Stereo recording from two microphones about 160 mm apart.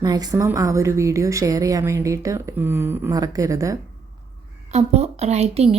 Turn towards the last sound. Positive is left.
turn(degrees=-40)  # may be behind; listen again after turning